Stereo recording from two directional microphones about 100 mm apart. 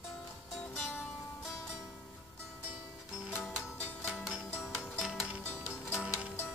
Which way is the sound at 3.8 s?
15° left (ahead or behind).